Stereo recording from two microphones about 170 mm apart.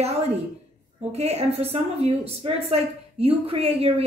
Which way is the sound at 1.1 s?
40° right (ahead or behind).